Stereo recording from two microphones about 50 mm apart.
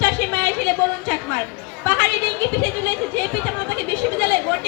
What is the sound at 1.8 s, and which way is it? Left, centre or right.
Chatter, left.